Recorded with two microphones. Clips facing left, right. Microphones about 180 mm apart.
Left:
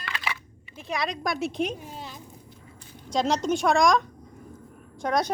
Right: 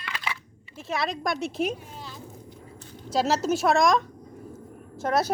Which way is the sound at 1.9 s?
20° left (ahead or behind).